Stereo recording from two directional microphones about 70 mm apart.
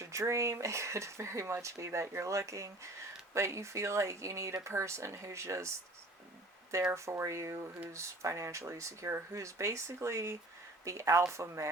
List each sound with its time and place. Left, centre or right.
0.0 s speech: right
6.9 s speech: right